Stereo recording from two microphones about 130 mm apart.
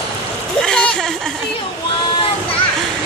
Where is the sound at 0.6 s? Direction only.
5° left (ahead or behind).